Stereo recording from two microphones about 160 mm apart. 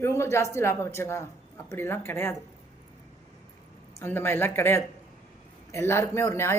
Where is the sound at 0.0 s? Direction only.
15° left (ahead or behind).